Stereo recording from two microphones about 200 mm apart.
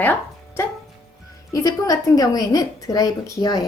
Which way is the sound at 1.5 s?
15° left (ahead or behind).